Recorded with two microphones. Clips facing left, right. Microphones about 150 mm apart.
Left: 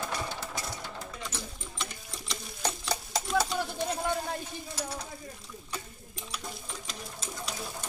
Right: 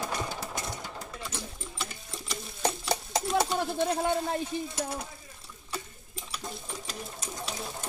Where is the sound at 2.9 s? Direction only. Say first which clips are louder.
Right 1 dB; 25° right (ahead or behind).